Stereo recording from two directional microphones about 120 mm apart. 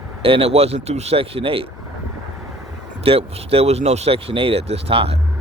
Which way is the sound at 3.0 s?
55° right (ahead or behind).